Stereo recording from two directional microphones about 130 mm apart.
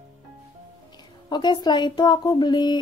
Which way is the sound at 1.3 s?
35° left (ahead or behind).